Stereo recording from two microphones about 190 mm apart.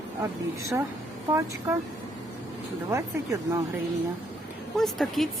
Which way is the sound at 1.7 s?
10° right (ahead or behind).